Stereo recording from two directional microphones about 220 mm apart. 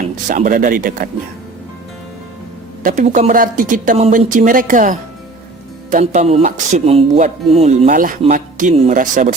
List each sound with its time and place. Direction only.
0.3 s speech: 35° right (ahead or behind)
2.8 s speech: 35° right (ahead or behind)